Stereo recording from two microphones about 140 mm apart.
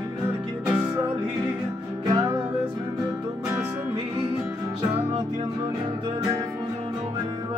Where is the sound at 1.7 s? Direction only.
30° right (ahead or behind).